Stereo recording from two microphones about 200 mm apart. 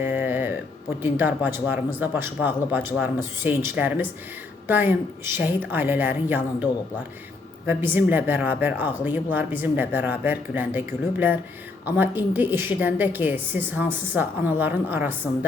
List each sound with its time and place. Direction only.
0.0 s speech: 10° right (ahead or behind)
7.7 s speech: 10° right (ahead or behind)